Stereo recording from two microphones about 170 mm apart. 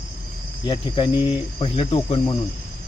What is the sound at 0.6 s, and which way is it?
Speech, 25° left (ahead or behind).